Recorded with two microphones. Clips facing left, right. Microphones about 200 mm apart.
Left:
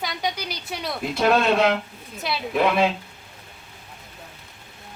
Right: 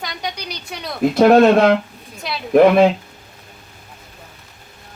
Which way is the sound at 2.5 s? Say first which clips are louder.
Right 11 dB; 55° right (ahead or behind).